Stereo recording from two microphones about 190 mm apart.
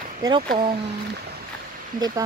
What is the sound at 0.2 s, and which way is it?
Speech, 20° right (ahead or behind).